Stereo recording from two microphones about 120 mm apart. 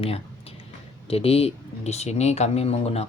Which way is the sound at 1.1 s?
55° left (ahead or behind).